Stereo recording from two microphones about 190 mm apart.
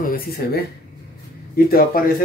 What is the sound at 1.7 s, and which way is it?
Speech, 50° left (ahead or behind).